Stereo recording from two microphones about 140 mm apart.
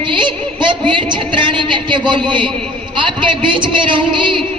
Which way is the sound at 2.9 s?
35° right (ahead or behind).